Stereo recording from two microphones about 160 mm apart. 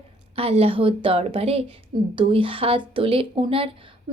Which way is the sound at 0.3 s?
35° right (ahead or behind).